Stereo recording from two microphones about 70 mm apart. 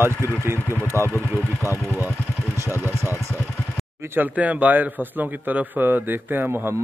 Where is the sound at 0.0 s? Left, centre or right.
Right.